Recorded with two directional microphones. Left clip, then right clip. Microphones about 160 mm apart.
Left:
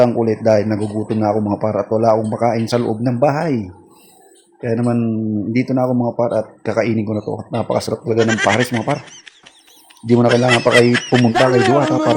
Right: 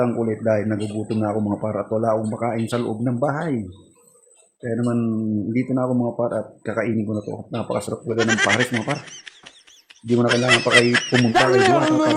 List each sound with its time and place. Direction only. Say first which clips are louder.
0.0 s speech: left 8 dB; 20° left (ahead or behind)
4.6 s speech: left 5 dB; 25° left (ahead or behind)
8.0 s speech: left 3 dB; centre (ahead or behind)